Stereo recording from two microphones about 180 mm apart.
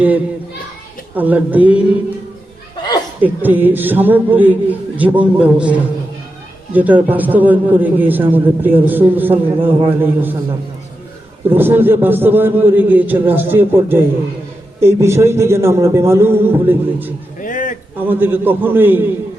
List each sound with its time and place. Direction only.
1.1 s a man's voice: 10° right (ahead or behind)
3.2 s a man's voice: 10° right (ahead or behind)
11.4 s a man's voice: 10° right (ahead or behind)
17.4 s a sound: 45° left (ahead or behind)
18.0 s a man's voice: 10° right (ahead or behind)